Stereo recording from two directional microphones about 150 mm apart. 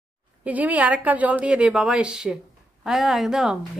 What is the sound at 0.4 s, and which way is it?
A woman's voice, 10° right (ahead or behind).